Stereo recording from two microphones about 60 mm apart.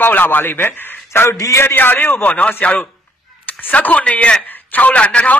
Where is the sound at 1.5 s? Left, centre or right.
Left.